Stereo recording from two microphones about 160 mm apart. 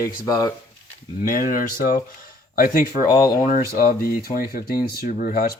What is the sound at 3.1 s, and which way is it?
Speech, 20° left (ahead or behind).